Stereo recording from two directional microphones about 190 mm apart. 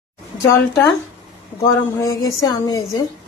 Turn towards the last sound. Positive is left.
turn(degrees=20)  # may be behind; listen again after turning